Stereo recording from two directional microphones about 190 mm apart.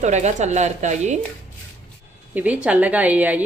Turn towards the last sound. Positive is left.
turn(degrees=-10)  # may be behind; listen again after turning